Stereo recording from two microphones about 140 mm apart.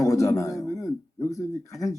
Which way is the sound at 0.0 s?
20° left (ahead or behind).